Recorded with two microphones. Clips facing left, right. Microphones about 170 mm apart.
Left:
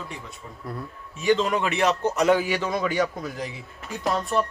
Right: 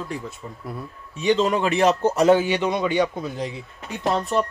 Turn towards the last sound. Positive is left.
turn(degrees=-25)  # may be behind; listen again after turning